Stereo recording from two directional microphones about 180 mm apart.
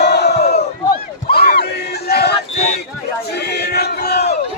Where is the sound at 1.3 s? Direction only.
60° left (ahead or behind).